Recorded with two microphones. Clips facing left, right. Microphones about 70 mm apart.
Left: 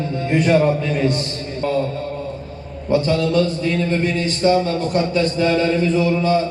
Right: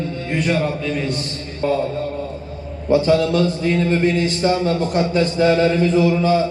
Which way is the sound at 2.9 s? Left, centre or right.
Centre.